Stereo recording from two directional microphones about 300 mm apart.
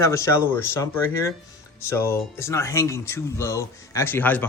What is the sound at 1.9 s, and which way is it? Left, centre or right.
Speech, centre.